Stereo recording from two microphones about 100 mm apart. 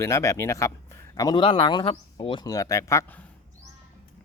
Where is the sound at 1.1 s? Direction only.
45° left (ahead or behind).